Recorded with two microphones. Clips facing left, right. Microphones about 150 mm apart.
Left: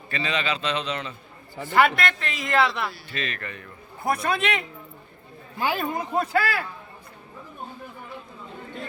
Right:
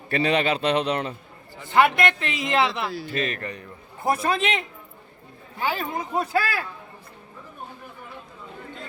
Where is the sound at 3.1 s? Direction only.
45° right (ahead or behind).